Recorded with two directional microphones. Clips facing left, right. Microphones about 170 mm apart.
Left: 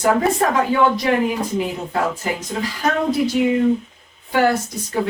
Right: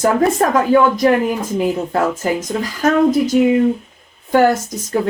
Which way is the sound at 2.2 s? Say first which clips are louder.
Right 5 dB; 45° right (ahead or behind).